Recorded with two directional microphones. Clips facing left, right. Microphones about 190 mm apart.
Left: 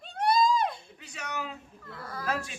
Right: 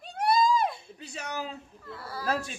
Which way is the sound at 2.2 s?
35° right (ahead or behind).